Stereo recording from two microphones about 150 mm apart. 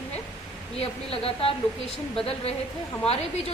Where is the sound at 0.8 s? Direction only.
40° left (ahead or behind).